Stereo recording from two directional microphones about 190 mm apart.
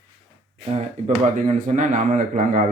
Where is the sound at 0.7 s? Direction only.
35° right (ahead or behind).